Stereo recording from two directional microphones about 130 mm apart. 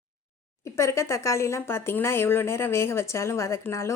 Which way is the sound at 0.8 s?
20° left (ahead or behind).